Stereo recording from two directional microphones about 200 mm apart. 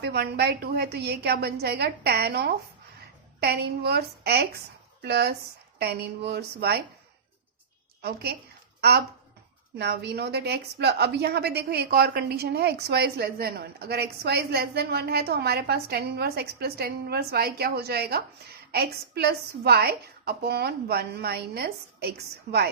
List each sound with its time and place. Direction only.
0.0 s a woman's voice: 55° right (ahead or behind)
8.0 s a woman's voice: 55° right (ahead or behind)